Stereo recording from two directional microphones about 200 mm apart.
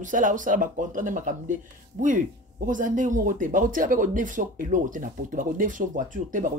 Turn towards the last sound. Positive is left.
turn(degrees=-40)  # may be behind; listen again after turning